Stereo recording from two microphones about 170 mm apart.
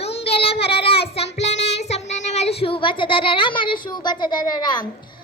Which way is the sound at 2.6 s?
30° left (ahead or behind).